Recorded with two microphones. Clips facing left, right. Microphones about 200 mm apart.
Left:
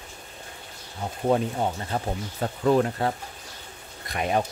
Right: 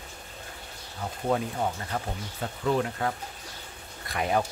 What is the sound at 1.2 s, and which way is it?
Speech, 30° left (ahead or behind).